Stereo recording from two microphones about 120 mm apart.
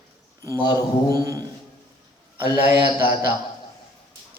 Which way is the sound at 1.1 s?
30° right (ahead or behind).